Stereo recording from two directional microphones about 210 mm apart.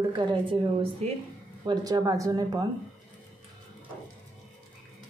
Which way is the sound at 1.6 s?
20° right (ahead or behind).